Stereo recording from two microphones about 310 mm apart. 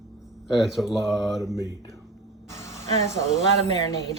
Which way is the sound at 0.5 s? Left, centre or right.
Centre.